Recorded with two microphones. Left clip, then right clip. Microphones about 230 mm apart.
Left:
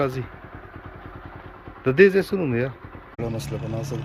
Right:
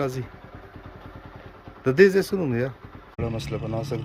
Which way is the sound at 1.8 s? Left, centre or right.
Centre.